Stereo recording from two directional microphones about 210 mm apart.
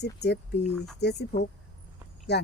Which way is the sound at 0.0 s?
55° left (ahead or behind).